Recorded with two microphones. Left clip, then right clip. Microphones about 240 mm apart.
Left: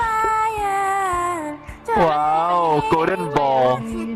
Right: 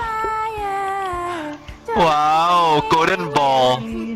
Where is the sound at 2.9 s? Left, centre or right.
Right.